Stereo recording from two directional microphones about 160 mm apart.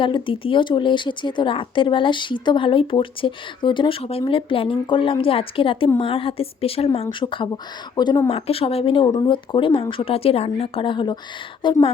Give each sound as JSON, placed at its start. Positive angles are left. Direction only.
{"t": 0.0, "sound": "speech", "side_deg": 30}